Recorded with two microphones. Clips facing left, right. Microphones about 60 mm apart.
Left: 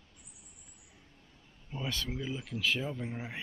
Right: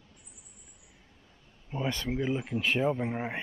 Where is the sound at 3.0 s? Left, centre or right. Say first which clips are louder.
Right 7 dB; right.